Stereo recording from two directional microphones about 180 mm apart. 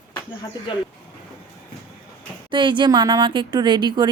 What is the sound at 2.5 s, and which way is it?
Speech, 25° right (ahead or behind).